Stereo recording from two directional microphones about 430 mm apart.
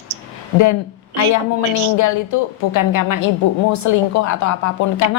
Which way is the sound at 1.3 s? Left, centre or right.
Left.